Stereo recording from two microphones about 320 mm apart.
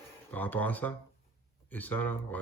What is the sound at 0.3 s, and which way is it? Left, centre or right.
Speech, centre.